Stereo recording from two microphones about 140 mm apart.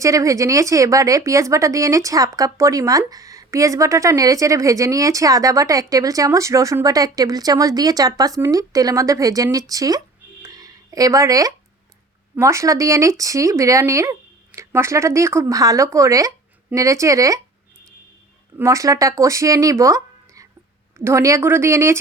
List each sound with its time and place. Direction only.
0.0 s a woman's voice: 25° right (ahead or behind)
10.4 s a sound: 25° right (ahead or behind)
12.4 s a woman's voice: 20° right (ahead or behind)
18.5 s a woman's voice: 20° right (ahead or behind)